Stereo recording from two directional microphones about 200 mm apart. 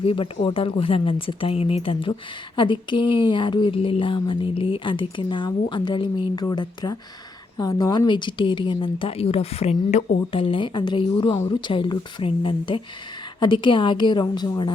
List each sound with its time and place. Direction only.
0.0 s speech: 25° left (ahead or behind)